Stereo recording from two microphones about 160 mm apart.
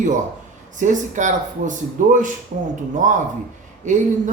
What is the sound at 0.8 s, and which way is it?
Speech, 50° right (ahead or behind).